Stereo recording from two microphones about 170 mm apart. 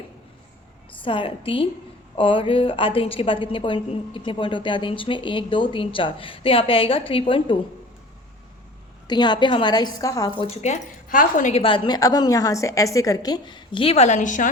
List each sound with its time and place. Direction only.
1.0 s a woman's voice: 30° left (ahead or behind)
9.0 s a woman's voice: 25° left (ahead or behind)
10.5 s speech: 45° left (ahead or behind)
11.6 s a woman's voice: 25° left (ahead or behind); by 14.5 s 50° left (ahead or behind)